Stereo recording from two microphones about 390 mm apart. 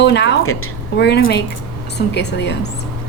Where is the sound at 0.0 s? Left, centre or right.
Left.